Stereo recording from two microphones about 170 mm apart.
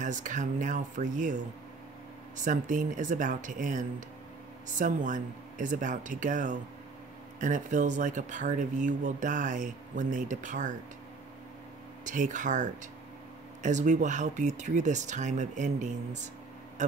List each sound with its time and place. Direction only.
0.0 s speech: 50° right (ahead or behind)
12.0 s speech: 50° right (ahead or behind)